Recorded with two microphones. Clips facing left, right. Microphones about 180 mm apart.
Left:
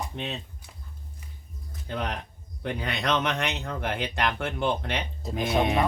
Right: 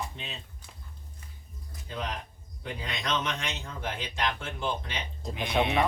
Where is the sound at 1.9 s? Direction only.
60° left (ahead or behind).